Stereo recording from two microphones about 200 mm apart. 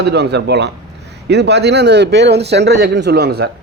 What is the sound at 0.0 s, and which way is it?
Speech, 55° right (ahead or behind).